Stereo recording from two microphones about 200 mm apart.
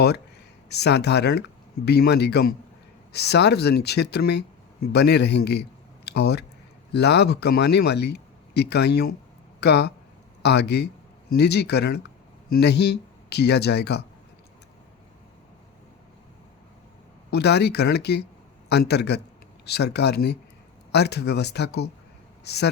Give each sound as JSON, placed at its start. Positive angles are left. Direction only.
{"t": 0.7, "sound": "speech", "side_deg": 55}
{"t": 17.3, "sound": "speech", "side_deg": 55}